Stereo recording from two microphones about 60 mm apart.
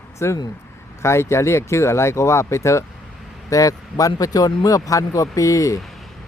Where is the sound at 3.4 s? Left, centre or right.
Left.